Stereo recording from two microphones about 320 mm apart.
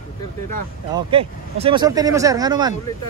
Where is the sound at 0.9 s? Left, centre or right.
Centre.